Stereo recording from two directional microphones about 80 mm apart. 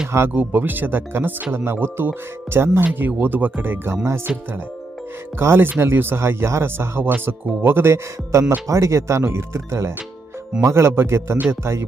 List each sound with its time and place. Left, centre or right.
0.3 s speech: right
5.4 s speech: right